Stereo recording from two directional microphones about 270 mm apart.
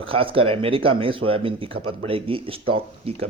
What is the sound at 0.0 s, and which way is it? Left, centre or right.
Speech, centre.